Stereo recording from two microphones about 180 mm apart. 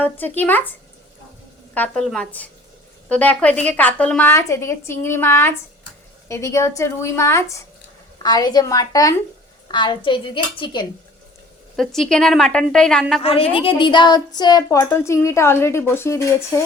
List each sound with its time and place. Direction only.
0.3 s a woman's voice: 10° left (ahead or behind)
1.7 s a woman's voice: 5° left (ahead or behind); by 10.8 s 25° left (ahead or behind)
11.8 s a woman's voice: centre (ahead or behind)
13.2 s a woman's voice: 30° left (ahead or behind); by 16.6 s 15° left (ahead or behind)